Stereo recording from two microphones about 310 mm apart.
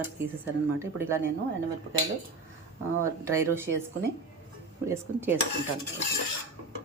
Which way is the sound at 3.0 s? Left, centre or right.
Centre.